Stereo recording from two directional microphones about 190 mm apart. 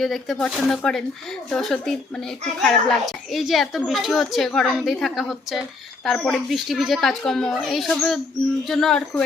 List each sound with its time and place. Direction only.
0.0 s a woman's voice: centre (ahead or behind)